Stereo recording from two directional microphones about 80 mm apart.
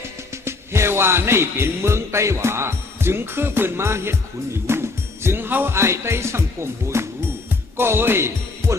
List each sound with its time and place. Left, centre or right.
0.4 s music: right
7.8 s speech: right